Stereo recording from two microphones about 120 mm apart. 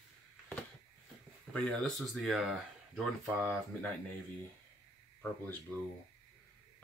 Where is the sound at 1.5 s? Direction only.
5° left (ahead or behind).